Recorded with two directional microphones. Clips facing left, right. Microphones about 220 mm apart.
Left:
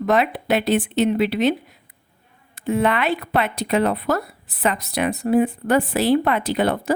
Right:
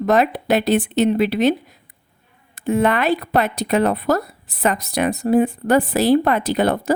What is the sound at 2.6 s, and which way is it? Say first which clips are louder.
A woman's voice: right 2 dB; 45° right (ahead or behind).